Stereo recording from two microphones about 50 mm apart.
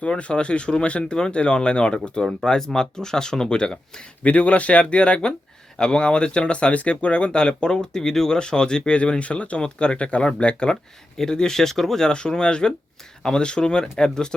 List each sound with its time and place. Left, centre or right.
0.0 s speech: left